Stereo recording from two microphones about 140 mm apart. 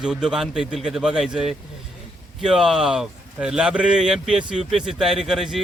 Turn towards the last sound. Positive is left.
turn(degrees=0)  # may be behind; listen again after turning